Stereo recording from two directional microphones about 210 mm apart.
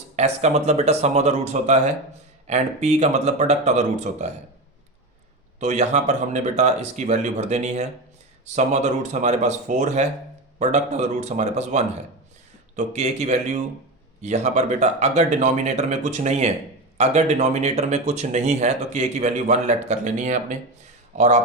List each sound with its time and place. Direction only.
0.2 s speech: 30° right (ahead or behind)
5.5 s speech: 35° right (ahead or behind)